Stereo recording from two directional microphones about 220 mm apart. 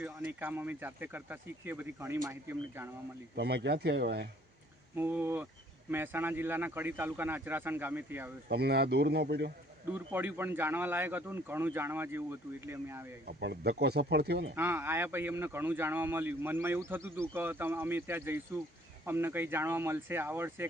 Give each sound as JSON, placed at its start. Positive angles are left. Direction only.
{"t": 0.0, "sound": "speech", "side_deg": -10}
{"t": 3.3, "sound": "speech", "side_deg": -50}
{"t": 4.9, "sound": "speech", "side_deg": -10}
{"t": 8.4, "sound": "speech", "side_deg": -45}
{"t": 9.8, "sound": "speech", "side_deg": -10}
{"t": 13.2, "sound": "speech", "side_deg": -50}
{"t": 14.5, "sound": "speech", "side_deg": -10}